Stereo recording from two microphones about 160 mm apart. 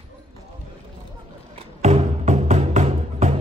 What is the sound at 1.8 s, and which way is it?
Music, 50° right (ahead or behind).